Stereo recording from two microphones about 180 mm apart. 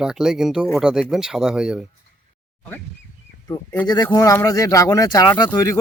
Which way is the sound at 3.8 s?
20° left (ahead or behind).